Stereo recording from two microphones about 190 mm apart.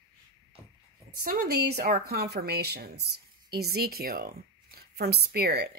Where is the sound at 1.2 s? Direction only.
55° right (ahead or behind).